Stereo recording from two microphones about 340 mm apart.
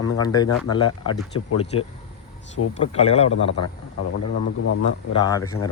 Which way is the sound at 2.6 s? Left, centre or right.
Left.